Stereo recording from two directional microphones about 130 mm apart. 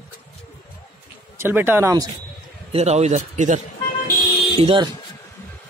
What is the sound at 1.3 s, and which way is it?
Speech, 15° right (ahead or behind).